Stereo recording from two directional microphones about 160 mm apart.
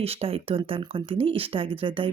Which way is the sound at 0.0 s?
40° right (ahead or behind).